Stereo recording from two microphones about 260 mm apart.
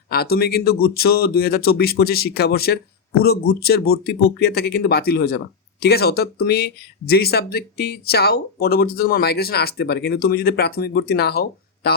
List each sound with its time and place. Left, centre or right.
0.1 s speech: left